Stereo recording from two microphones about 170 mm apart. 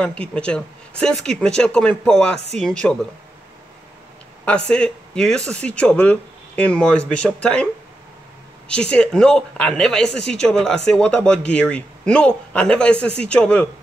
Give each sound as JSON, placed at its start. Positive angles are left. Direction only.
{"t": 0.0, "sound": "speech", "side_deg": 5}
{"t": 4.6, "sound": "speech", "side_deg": 5}
{"t": 8.6, "sound": "speech", "side_deg": 5}